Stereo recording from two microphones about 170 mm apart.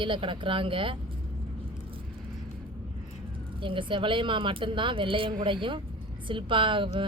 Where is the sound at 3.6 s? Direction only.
30° right (ahead or behind).